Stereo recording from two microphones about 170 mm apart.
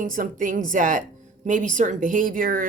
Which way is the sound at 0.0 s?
50° right (ahead or behind).